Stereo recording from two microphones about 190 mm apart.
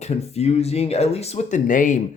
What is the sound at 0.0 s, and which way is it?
Speech, 35° left (ahead or behind).